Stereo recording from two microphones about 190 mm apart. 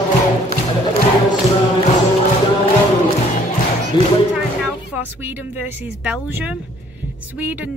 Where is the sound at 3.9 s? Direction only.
20° left (ahead or behind).